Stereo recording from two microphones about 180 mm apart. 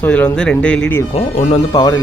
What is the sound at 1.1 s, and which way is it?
Speech, 35° left (ahead or behind).